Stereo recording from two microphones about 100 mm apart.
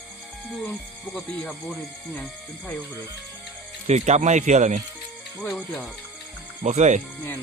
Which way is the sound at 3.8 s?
90° right.